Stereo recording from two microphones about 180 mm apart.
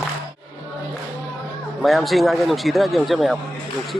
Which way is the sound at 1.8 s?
Centre (ahead or behind).